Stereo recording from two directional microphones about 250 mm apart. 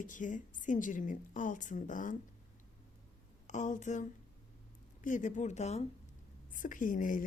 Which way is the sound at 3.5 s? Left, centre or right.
Left.